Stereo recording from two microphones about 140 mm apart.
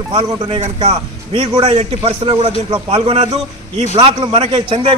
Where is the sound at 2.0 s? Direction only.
40° right (ahead or behind).